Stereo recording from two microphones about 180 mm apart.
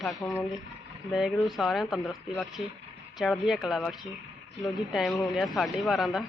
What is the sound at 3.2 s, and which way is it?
Speech, centre (ahead or behind).